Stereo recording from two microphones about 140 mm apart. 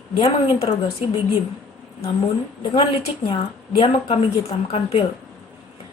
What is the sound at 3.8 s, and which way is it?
A woman's voice, 45° left (ahead or behind).